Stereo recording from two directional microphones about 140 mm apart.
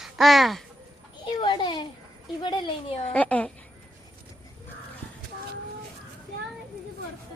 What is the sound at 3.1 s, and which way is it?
Speech, 10° left (ahead or behind).